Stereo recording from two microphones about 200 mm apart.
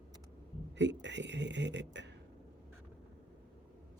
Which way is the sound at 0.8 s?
60° right (ahead or behind).